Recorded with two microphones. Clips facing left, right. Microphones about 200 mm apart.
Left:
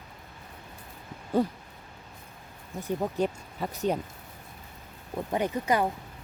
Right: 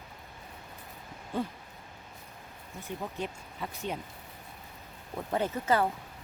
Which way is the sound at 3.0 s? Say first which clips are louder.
Left 9 dB; 40° left (ahead or behind).